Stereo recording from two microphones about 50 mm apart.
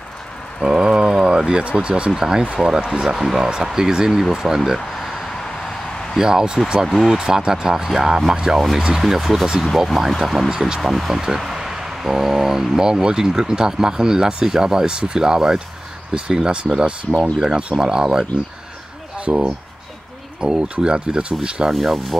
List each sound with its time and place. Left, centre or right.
0.7 s speech: centre
4.7 s a sound: centre
6.1 s speech: centre
6.9 s speech: centre
7.2 s speech: centre
21.7 s speech: centre